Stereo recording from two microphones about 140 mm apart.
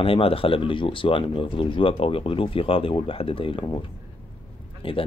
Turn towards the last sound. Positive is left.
turn(degrees=40)  # may be behind; listen again after turning